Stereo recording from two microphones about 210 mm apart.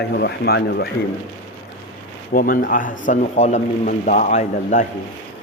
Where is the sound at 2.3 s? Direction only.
40° left (ahead or behind).